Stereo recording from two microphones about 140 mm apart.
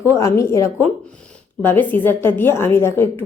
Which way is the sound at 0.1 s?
20° left (ahead or behind).